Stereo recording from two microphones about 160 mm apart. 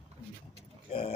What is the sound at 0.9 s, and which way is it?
Speech, 35° left (ahead or behind).